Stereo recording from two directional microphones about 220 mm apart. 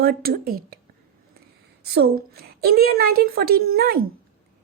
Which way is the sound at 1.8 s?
45° right (ahead or behind).